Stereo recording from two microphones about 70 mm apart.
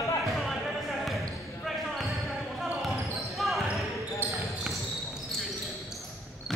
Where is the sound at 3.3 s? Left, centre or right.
Centre.